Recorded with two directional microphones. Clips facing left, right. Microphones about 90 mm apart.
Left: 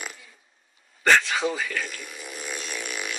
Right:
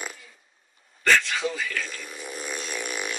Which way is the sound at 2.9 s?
35° right (ahead or behind).